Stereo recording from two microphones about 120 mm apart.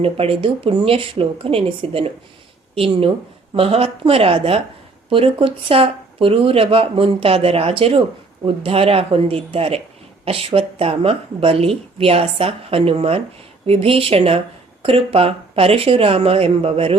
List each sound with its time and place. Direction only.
0.0 s speech: 50° right (ahead or behind)